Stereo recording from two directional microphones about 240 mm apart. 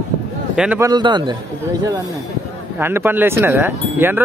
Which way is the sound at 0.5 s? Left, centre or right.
Centre.